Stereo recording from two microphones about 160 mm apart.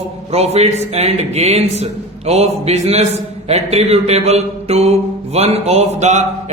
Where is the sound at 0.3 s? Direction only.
40° right (ahead or behind).